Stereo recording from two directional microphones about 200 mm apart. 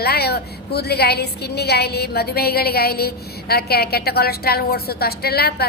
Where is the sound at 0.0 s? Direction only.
50° left (ahead or behind).